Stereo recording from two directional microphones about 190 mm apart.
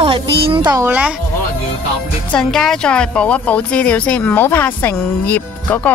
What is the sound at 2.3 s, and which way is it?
Speech, centre (ahead or behind).